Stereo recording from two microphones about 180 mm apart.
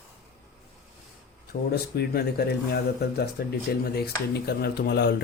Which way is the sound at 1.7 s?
65° left (ahead or behind).